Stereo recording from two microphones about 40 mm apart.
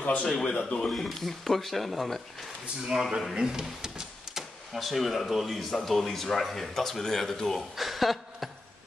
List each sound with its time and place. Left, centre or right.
0.0 s speech: left
0.8 s speech: centre
2.9 s speech: centre
7.7 s chuckle: centre